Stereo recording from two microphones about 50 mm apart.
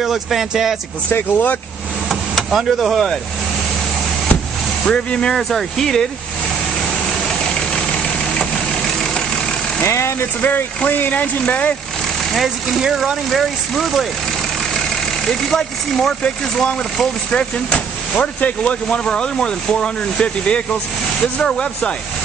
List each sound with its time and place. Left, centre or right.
0.0 s speech: centre
1.1 s speech: left
2.0 s speech: centre
4.8 s speech: centre
9.8 s vehicle: left
10.8 s speech: left
12.3 s speech: centre
12.8 s speech: centre
13.3 s speech: centre
15.2 s speech: centre
17.3 s speech: left